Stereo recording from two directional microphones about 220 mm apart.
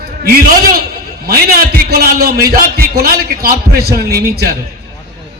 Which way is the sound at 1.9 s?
45° right (ahead or behind).